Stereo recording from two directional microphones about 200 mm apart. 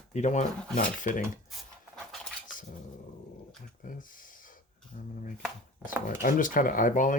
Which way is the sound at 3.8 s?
45° left (ahead or behind).